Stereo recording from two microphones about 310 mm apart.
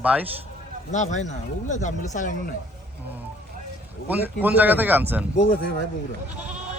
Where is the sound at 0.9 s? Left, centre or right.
Left.